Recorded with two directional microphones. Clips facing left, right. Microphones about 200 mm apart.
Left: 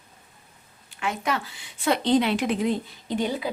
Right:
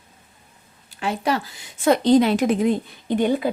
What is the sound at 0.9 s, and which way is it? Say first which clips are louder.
A woman's voice: right 5 dB; 35° right (ahead or behind).